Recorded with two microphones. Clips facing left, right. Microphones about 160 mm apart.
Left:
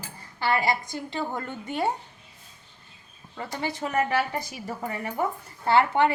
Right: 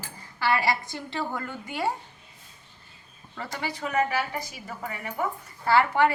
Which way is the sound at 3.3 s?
15° left (ahead or behind).